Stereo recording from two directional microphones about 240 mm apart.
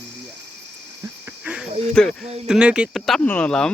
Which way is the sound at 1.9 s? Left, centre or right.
Centre.